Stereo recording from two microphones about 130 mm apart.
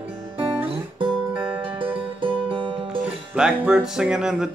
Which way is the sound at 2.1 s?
40° right (ahead or behind).